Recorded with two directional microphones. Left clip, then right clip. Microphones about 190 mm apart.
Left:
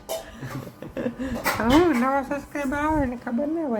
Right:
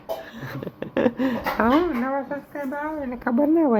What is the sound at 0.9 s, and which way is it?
Speech, 40° right (ahead or behind).